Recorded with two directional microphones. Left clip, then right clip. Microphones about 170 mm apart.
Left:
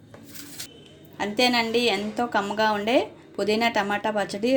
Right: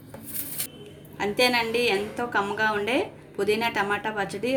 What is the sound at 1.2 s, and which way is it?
A woman's voice, 45° left (ahead or behind).